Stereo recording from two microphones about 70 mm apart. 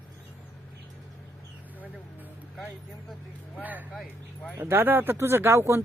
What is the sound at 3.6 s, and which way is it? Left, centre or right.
Speech, right.